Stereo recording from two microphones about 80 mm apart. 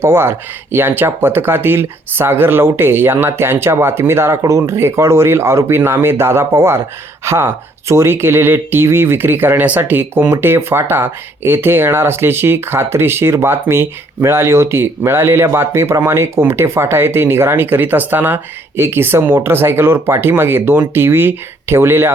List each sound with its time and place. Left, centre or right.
0.0 s speech: right